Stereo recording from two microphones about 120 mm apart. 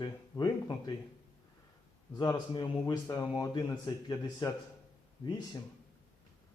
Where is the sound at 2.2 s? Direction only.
35° left (ahead or behind).